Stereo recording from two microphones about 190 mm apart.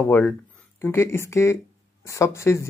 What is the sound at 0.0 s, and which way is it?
Speech, 10° left (ahead or behind).